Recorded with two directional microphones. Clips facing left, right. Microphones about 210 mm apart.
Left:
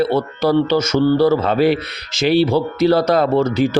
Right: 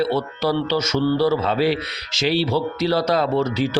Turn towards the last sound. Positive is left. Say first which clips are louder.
# left 5 dB
turn(degrees=50)  # may be behind; listen again after turning